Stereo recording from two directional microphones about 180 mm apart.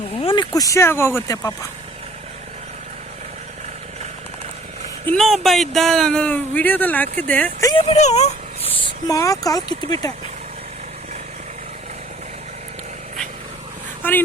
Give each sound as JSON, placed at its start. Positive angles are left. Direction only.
{"t": 0.2, "sound": "speech", "side_deg": 25}
{"t": 5.0, "sound": "speech", "side_deg": 0}
{"t": 7.7, "sound": "speech", "side_deg": 30}
{"t": 8.8, "sound": "speech", "side_deg": 20}
{"t": 14.0, "sound": "speech", "side_deg": 10}